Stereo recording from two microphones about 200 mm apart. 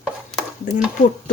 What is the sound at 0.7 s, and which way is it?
Speech, 40° left (ahead or behind).